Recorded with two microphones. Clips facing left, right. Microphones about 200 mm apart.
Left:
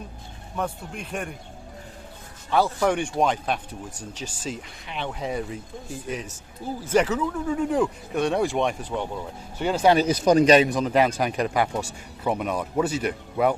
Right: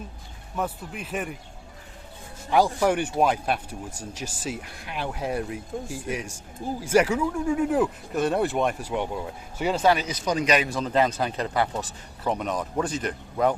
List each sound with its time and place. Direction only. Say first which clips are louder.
0.5 s speech: even; 5° right (ahead or behind)
2.5 s speech: right 1 dB; 15° right (ahead or behind)
10.1 s speech: left 8 dB; 50° left (ahead or behind)
10.4 s speech: left 6 dB; 30° left (ahead or behind)
10.7 s speech: left 2 dB; 15° left (ahead or behind)